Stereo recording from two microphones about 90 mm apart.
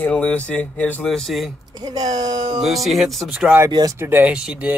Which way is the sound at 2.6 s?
Centre (ahead or behind).